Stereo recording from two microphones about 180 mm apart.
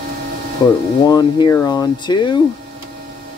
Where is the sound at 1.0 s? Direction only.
20° left (ahead or behind).